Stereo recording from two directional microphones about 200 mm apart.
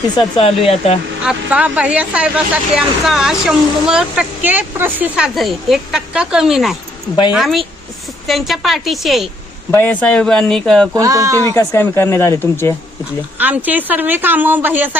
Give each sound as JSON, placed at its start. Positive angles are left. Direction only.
{"t": 0.3, "sound": "speech", "side_deg": 30}
{"t": 1.2, "sound": "speech", "side_deg": -5}
{"t": 10.9, "sound": "a woman's voice", "side_deg": -15}
{"t": 11.5, "sound": "speech", "side_deg": 10}
{"t": 13.4, "sound": "a woman's voice", "side_deg": -10}